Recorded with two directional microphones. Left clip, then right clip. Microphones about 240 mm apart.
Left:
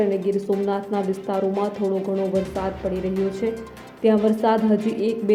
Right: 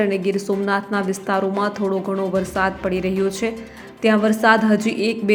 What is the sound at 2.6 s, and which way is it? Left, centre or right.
A woman's voice, centre.